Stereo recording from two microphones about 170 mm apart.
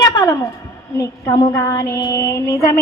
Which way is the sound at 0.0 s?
20° left (ahead or behind).